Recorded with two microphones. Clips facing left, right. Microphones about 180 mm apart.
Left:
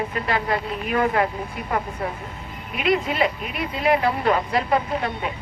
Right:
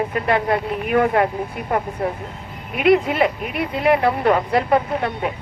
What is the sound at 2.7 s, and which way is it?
A woman's voice, 55° right (ahead or behind).